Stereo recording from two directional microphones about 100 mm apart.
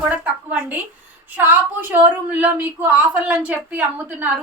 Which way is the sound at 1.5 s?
20° right (ahead or behind).